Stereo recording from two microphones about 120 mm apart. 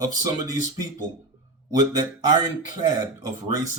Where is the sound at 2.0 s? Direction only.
35° right (ahead or behind).